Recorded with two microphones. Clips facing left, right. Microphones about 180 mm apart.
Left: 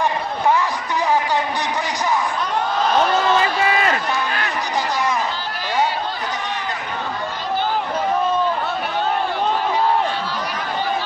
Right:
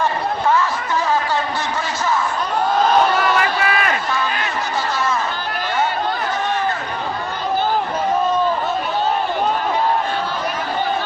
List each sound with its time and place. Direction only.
3.2 s run: 25° left (ahead or behind)